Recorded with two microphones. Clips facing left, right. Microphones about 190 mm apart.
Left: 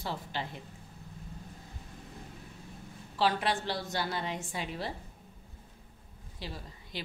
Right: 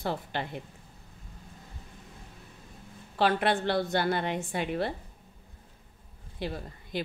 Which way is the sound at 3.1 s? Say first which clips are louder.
Right 4 dB; 55° right (ahead or behind).